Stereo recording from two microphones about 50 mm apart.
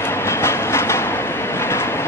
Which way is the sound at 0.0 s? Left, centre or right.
Left.